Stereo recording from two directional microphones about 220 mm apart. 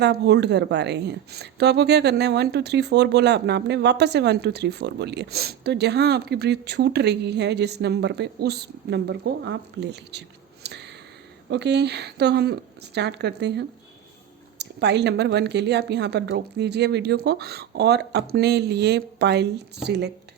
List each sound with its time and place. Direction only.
0.0 s speech: 50° right (ahead or behind)